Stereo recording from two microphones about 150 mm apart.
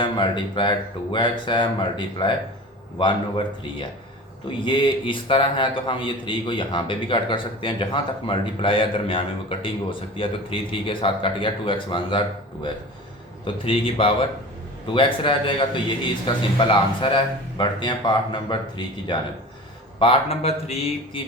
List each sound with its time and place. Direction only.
0.0 s a man's voice: 30° left (ahead or behind)
13.4 s a man's voice: 35° left (ahead or behind)